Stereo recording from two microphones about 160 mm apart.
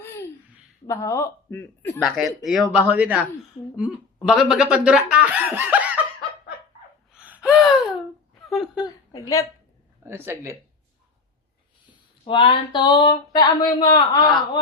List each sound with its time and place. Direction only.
0.9 s speech: 20° left (ahead or behind)
2.4 s speech: 5° right (ahead or behind)
7.1 s gasp: 5° right (ahead or behind)
8.4 s speech: centre (ahead or behind)
9.1 s a sound: 20° left (ahead or behind)
10.0 s speech: 15° right (ahead or behind)
12.3 s a sound: 30° left (ahead or behind)